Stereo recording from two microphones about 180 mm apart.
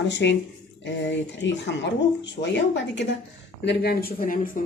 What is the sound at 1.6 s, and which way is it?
Speech, 80° left.